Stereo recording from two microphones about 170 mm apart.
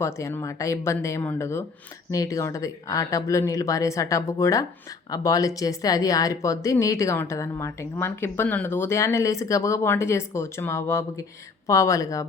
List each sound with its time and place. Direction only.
0.0 s speech: 15° left (ahead or behind)